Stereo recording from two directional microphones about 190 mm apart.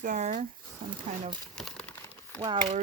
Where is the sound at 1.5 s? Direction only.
5° left (ahead or behind).